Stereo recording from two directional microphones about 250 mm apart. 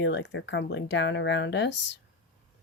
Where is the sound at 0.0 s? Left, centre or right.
Left.